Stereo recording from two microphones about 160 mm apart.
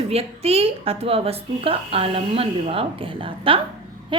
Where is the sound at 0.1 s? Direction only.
40° right (ahead or behind).